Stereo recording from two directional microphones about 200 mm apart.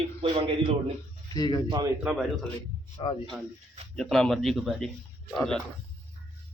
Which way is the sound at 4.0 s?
Centre (ahead or behind).